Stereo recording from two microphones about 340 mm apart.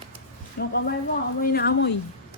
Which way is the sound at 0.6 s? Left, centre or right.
Left.